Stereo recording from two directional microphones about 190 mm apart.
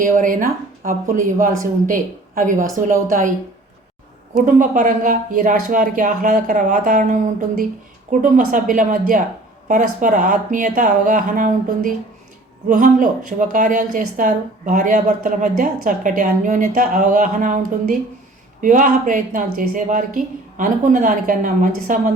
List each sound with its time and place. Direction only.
0.0 s a woman's voice: 45° right (ahead or behind)
4.4 s a woman's voice: 40° right (ahead or behind)